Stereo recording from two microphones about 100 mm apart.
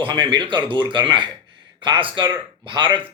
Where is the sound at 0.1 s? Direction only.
50° right (ahead or behind).